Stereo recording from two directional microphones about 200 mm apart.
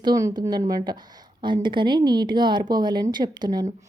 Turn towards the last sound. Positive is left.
turn(degrees=-20)  # may be behind; listen again after turning